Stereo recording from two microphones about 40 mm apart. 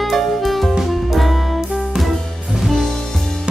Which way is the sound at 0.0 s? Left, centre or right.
Centre.